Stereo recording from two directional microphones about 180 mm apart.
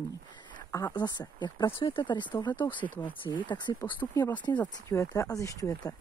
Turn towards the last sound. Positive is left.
turn(degrees=20)  # may be behind; listen again after turning